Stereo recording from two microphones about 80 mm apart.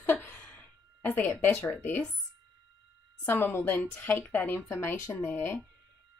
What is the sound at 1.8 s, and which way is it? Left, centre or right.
Speech, left.